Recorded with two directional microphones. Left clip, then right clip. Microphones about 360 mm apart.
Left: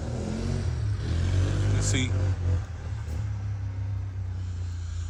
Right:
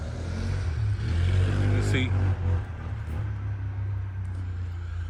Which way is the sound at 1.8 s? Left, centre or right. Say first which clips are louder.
Even; centre.